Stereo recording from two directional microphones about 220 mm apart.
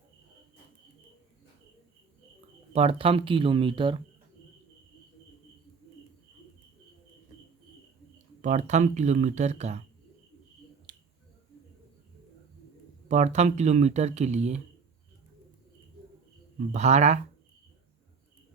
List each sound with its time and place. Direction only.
2.7 s speech: 25° right (ahead or behind)
8.4 s speech: 35° right (ahead or behind)
10.9 s finger snapping: 20° right (ahead or behind)
13.1 s speech: 30° right (ahead or behind)
16.7 s speech: 30° right (ahead or behind)